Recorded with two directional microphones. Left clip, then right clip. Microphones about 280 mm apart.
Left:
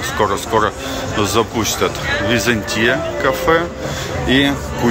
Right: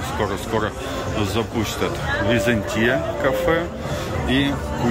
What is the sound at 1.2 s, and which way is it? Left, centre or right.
Speech, centre.